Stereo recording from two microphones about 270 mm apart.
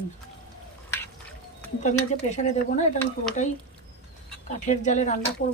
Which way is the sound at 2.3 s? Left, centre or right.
Left.